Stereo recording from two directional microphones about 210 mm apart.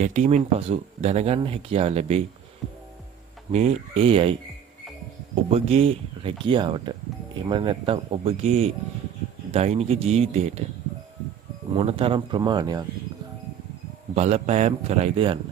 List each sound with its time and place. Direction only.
0.0 s speech: 35° right (ahead or behind)
3.5 s a man's voice: 30° right (ahead or behind)
11.7 s speech: 25° right (ahead or behind)
14.1 s a man's voice: 30° right (ahead or behind)